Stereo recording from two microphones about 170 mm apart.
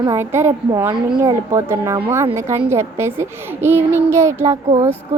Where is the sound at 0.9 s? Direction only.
25° right (ahead or behind).